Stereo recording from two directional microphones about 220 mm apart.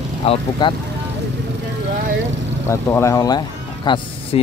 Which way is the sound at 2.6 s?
10° left (ahead or behind).